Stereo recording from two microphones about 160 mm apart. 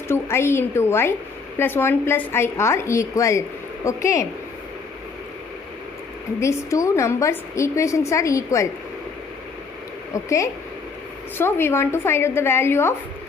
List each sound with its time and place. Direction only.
0.1 s a woman's voice: 15° left (ahead or behind)
6.4 s a woman's voice: 20° left (ahead or behind)
10.2 s a woman's voice: 20° left (ahead or behind)